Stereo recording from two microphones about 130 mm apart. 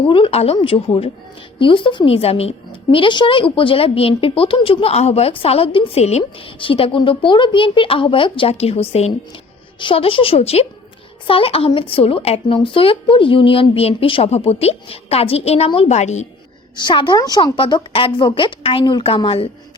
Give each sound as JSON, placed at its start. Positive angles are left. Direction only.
{"t": 0.0, "sound": "a woman's voice", "side_deg": 40}
{"t": 16.7, "sound": "a woman's voice", "side_deg": 35}